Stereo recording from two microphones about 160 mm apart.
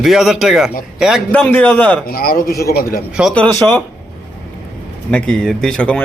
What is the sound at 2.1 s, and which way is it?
Speech, 65° left (ahead or behind).